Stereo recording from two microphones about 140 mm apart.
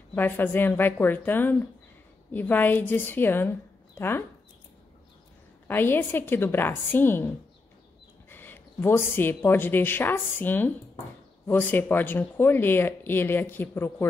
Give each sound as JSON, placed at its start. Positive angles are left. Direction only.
{"t": 0.1, "sound": "speech", "side_deg": 15}
{"t": 5.7, "sound": "speech", "side_deg": 15}
{"t": 8.3, "sound": "speech", "side_deg": 15}